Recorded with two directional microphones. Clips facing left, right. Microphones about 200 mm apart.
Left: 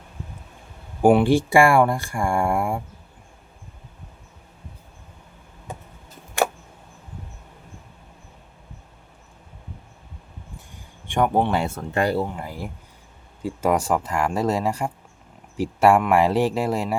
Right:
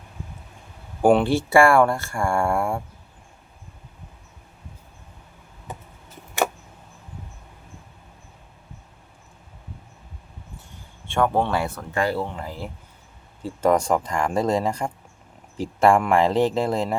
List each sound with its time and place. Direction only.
1.0 s speech: 15° left (ahead or behind)
11.0 s speech: 15° left (ahead or behind)
12.2 s speech: 10° left (ahead or behind)